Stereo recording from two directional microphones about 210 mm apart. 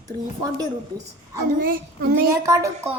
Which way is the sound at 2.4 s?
15° right (ahead or behind).